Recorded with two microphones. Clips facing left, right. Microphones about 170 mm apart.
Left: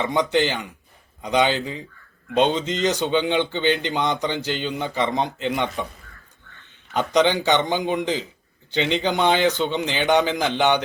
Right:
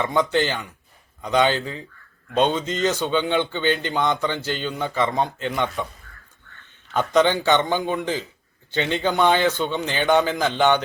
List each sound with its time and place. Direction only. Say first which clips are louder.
0.0 s speech: even; 15° left (ahead or behind)